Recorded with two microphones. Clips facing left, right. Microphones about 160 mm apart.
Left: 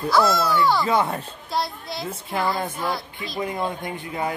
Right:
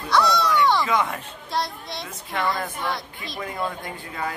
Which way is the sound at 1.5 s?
Centre (ahead or behind).